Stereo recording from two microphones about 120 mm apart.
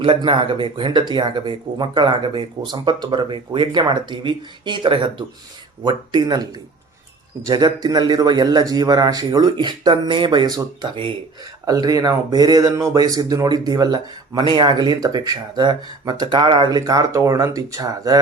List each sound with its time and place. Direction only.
0.0 s speech: 45° right (ahead or behind)
11.6 s speech: 30° right (ahead or behind); by 16.6 s 45° right (ahead or behind)
16.6 s speech: 30° right (ahead or behind)